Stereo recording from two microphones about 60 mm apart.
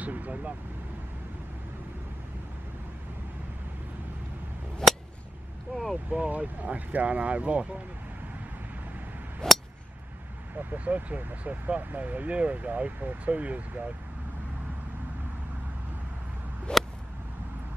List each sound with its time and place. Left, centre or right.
0.0 s speech: right
6.0 s speech: right
9.4 s a sound: centre
10.5 s speech: right
16.7 s whip: centre